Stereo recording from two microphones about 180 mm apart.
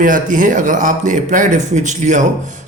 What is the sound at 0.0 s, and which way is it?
A man's voice, 50° right (ahead or behind).